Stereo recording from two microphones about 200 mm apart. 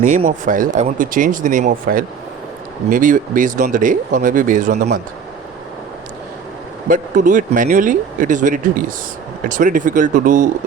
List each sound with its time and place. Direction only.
0.0 s speech: 40° right (ahead or behind)
6.8 s speech: 40° right (ahead or behind)